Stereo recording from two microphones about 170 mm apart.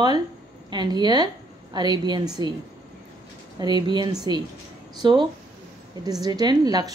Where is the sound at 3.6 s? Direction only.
25° right (ahead or behind).